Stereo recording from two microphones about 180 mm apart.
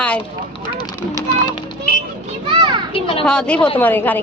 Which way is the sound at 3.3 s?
5° left (ahead or behind).